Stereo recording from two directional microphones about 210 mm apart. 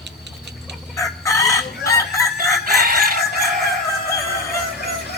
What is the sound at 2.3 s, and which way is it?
Chicken, 45° right (ahead or behind).